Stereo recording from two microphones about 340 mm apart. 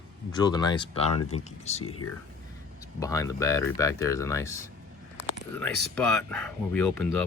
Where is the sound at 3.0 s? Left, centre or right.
Centre.